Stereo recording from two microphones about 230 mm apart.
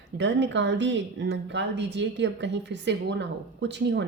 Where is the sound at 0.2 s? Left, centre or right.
Right.